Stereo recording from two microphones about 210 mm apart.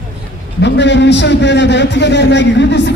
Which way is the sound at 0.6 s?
55° left (ahead or behind).